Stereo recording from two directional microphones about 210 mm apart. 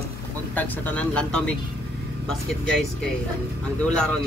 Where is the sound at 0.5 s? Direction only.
5° left (ahead or behind).